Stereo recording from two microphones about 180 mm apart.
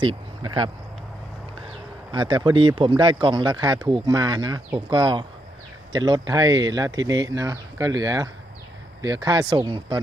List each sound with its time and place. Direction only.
0.0 s speech: 25° right (ahead or behind)
2.1 s speech: 25° right (ahead or behind)